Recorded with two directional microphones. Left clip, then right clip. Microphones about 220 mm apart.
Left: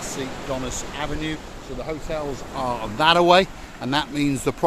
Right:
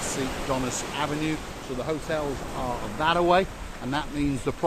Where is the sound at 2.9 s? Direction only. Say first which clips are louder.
Left 6 dB; 50° left (ahead or behind).